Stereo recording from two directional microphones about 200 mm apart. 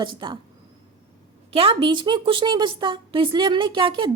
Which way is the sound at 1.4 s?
30° right (ahead or behind).